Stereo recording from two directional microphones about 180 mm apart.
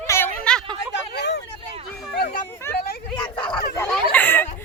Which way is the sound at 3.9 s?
10° left (ahead or behind).